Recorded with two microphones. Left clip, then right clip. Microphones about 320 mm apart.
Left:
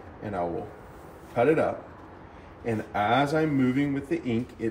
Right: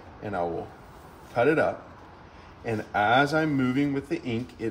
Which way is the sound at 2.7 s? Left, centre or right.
Centre.